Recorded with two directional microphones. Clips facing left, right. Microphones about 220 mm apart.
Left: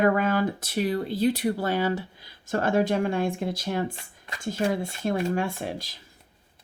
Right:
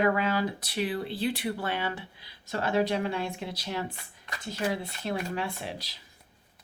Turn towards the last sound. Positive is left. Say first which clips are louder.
# left 5 dB
turn(degrees=50)  # may be behind; listen again after turning